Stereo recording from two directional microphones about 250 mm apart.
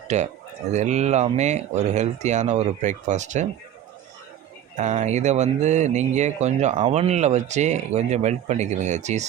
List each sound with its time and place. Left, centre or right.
0.1 s speech: right
4.8 s speech: right